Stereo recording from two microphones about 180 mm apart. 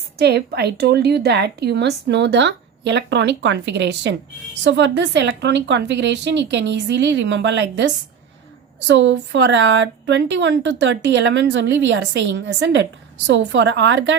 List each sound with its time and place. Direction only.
0.2 s a woman's voice: 65° right (ahead or behind); by 14.2 s 85° right